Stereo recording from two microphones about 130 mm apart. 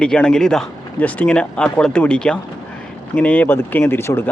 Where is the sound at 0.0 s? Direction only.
5° left (ahead or behind).